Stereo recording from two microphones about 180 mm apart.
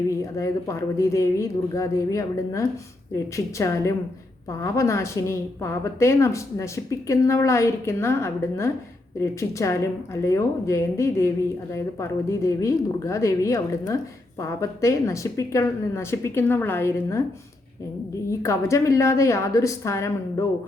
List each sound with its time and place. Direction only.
0.1 s a woman's voice: 15° left (ahead or behind)
18.3 s a woman's voice: 15° left (ahead or behind)